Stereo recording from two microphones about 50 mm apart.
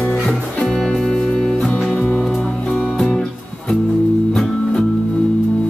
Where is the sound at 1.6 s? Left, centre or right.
Left.